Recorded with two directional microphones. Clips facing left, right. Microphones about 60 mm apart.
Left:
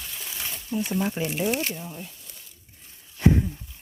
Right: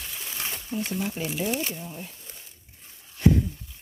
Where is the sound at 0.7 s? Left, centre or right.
Right.